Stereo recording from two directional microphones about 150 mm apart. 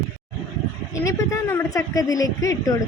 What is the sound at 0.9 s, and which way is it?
Speech, 20° left (ahead or behind).